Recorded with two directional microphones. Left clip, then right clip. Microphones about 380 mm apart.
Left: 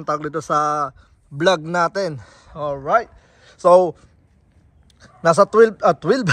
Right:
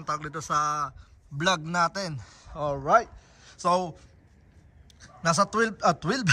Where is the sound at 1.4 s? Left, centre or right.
Centre.